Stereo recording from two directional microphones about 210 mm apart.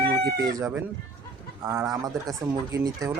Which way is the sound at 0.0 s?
45° right (ahead or behind).